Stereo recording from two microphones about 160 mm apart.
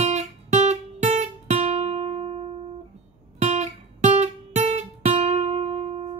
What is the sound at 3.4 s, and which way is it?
Music, 45° right (ahead or behind).